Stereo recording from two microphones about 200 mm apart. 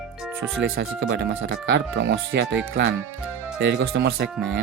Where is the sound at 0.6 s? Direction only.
60° right (ahead or behind).